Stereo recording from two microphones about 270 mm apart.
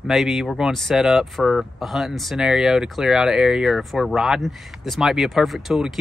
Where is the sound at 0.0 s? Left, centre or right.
Centre.